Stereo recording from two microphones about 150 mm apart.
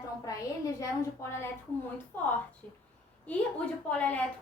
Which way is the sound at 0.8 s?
15° left (ahead or behind).